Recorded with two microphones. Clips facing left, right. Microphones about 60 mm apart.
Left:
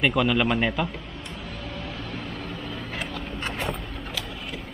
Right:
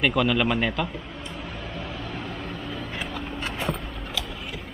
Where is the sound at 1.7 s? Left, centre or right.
Centre.